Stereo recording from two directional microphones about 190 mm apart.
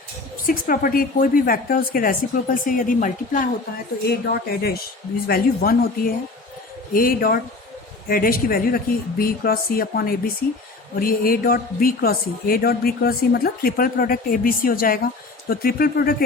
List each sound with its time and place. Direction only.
0.4 s a woman's voice: 50° left (ahead or behind)
4.0 s a woman's voice: 55° left (ahead or behind)